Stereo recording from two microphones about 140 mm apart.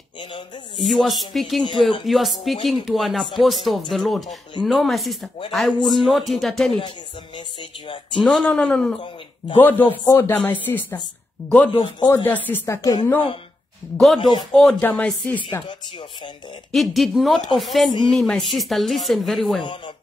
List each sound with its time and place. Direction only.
0.7 s speech: centre (ahead or behind)
8.2 s speech: centre (ahead or behind)
11.7 s a man's voice: 35° left (ahead or behind)
12.1 s speech: 15° left (ahead or behind)
14.5 s speech: centre (ahead or behind)
16.7 s speech: centre (ahead or behind)